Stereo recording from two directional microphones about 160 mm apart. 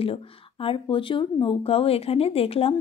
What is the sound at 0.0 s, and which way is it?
Speech, 35° left (ahead or behind).